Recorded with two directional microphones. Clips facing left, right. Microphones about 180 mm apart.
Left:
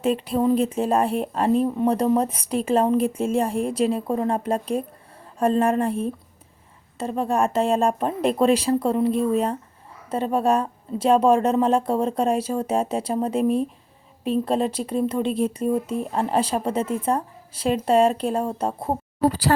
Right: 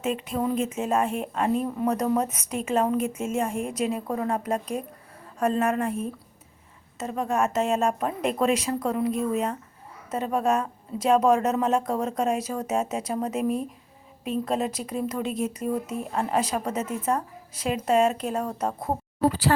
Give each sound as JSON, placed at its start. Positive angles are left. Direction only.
{"t": 0.0, "sound": "speech", "side_deg": 35}